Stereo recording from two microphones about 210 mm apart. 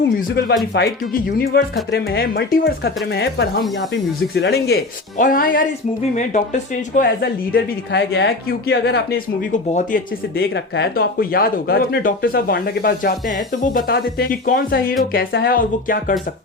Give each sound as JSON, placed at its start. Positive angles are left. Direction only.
{"t": 0.2, "sound": "speech", "side_deg": 50}